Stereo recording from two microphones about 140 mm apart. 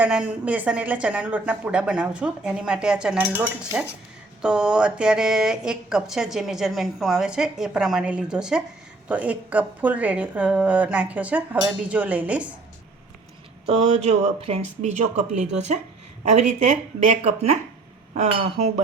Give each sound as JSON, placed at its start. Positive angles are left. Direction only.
{"t": 0.0, "sound": "a woman's voice", "side_deg": -10}
{"t": 13.7, "sound": "speech", "side_deg": -50}
{"t": 18.1, "sound": "speech", "side_deg": -70}